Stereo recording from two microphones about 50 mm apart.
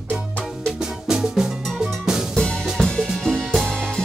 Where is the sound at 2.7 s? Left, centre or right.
Centre.